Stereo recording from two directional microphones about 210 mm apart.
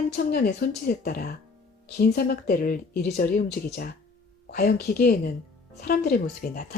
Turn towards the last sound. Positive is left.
turn(degrees=45)  # may be behind; listen again after turning